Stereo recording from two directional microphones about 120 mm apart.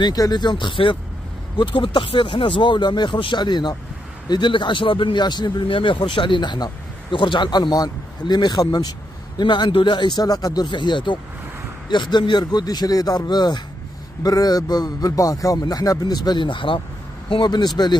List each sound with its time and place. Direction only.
0.0 s speech: 35° left (ahead or behind)